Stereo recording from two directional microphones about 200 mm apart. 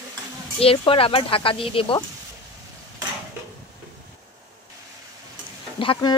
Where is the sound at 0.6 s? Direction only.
30° left (ahead or behind).